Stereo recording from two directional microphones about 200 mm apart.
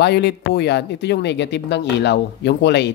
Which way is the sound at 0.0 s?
55° left (ahead or behind).